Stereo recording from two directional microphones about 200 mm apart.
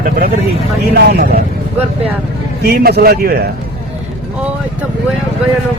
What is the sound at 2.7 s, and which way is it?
Speech, 50° right (ahead or behind).